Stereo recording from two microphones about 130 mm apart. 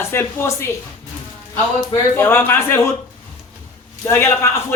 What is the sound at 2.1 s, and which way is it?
Speech, 15° left (ahead or behind).